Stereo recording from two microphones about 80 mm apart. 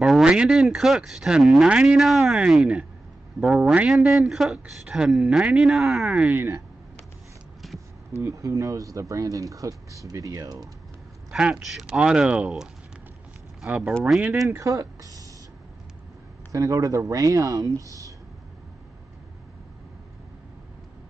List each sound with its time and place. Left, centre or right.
0.0 s speech: centre
6.0 s speech: centre
7.6 s a sound: centre
8.2 s speech: right
11.3 s speech: centre
13.7 s speech: centre
14.6 s speech: right
16.5 s speech: right